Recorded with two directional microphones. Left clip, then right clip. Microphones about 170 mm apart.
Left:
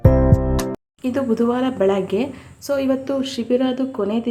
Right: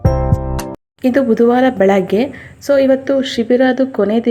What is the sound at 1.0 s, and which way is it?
A woman's voice, 20° right (ahead or behind).